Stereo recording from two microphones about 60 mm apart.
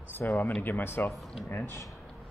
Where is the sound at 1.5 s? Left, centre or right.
Left.